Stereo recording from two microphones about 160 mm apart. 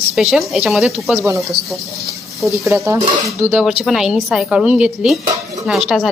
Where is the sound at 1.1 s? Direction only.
20° right (ahead or behind).